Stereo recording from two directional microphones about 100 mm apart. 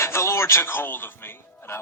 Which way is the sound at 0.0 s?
25° left (ahead or behind).